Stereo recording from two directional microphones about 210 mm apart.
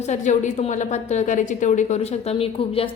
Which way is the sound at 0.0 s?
35° left (ahead or behind).